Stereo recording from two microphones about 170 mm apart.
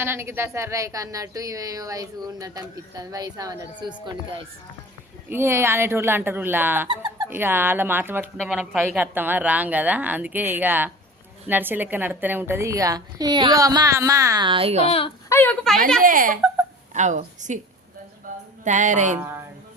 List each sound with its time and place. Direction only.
0.0 s speech: 15° right (ahead or behind)
5.3 s speech: 15° right (ahead or behind)
6.8 s a sound: 30° right (ahead or behind)
7.3 s speech: 10° right (ahead or behind); by 14.8 s 35° right (ahead or behind)
14.8 s speech: 35° left (ahead or behind)
15.3 s a woman's voice: 10° left (ahead or behind)
16.0 s speech: 55° right (ahead or behind)
18.6 s speech: 45° right (ahead or behind)
19.2 s speech: 15° right (ahead or behind)